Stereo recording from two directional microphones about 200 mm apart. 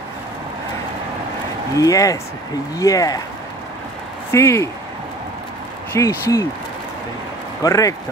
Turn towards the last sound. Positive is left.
turn(degrees=15)  # may be behind; listen again after turning